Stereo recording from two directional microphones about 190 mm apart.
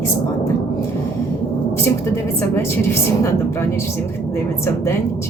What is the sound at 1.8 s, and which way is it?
A woman's voice, 15° left (ahead or behind).